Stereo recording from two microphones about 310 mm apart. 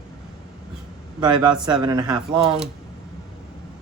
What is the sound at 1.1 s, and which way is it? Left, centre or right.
A man's voice, centre.